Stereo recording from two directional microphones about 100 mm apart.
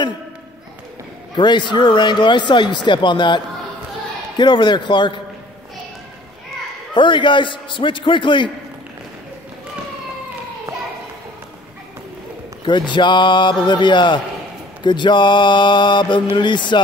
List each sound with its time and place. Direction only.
1.3 s a man's voice: 50° left (ahead or behind)
6.9 s a man's voice: 50° left (ahead or behind)
12.6 s a man's voice: 50° left (ahead or behind)